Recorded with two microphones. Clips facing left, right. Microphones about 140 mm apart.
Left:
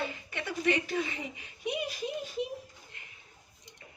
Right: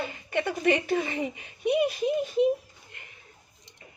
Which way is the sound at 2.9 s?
60° right (ahead or behind).